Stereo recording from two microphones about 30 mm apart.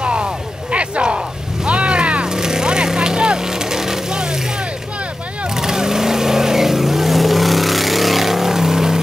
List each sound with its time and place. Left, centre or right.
0.0 s a sound: right
2.2 s vehicle: right
5.5 s vehicle: centre